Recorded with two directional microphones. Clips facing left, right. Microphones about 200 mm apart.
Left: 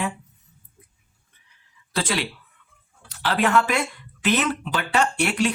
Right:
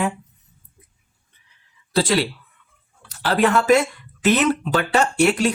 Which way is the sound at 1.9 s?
35° right (ahead or behind).